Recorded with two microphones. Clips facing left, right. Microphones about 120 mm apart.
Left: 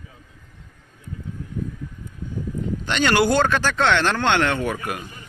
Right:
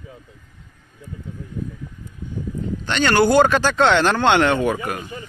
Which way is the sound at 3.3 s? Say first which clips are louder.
Right 4 dB; 15° right (ahead or behind).